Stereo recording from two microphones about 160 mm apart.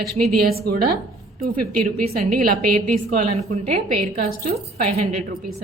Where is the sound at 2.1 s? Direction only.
65° right (ahead or behind).